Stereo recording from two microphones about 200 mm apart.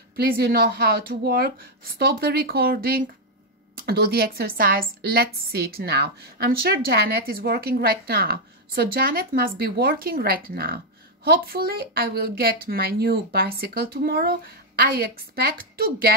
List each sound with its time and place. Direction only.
0.1 s a woman's voice: 50° right (ahead or behind)